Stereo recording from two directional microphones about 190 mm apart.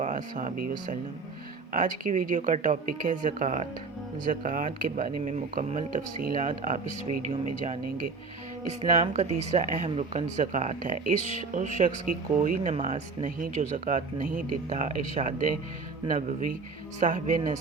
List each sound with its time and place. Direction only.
0.0 s speech: 45° right (ahead or behind)
1.7 s speech: 45° right (ahead or behind)
8.8 s speech: 35° right (ahead or behind)